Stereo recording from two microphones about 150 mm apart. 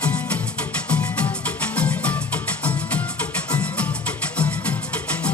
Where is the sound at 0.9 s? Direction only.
10° left (ahead or behind).